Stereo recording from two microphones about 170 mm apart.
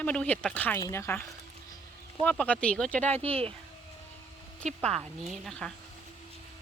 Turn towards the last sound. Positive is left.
turn(degrees=5)  # may be behind; listen again after turning